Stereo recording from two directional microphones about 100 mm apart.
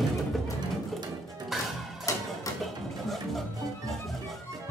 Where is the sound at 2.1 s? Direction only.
35° left (ahead or behind).